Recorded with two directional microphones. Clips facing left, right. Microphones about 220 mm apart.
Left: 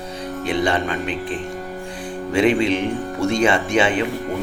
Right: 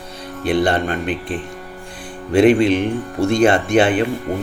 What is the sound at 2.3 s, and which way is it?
A man's voice, 50° right (ahead or behind).